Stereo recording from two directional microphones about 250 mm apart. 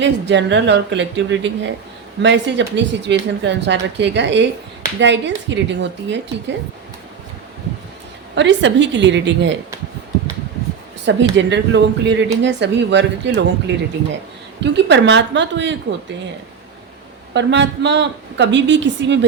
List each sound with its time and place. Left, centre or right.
0.0 s a woman's voice: right
8.4 s a woman's voice: right
11.0 s a woman's voice: right
17.3 s a woman's voice: right